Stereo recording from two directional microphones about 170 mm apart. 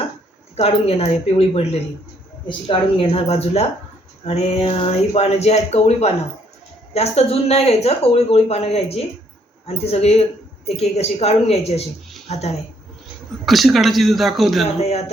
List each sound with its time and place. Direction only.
0.5 s a woman's voice: 35° left (ahead or behind)
13.4 s speech: centre (ahead or behind)
14.6 s a woman's voice: 40° left (ahead or behind)